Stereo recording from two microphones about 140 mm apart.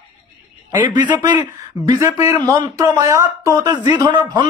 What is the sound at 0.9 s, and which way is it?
A man's voice, 30° right (ahead or behind).